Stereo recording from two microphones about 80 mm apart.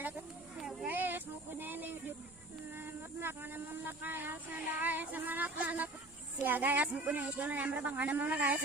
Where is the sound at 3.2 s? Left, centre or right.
Right.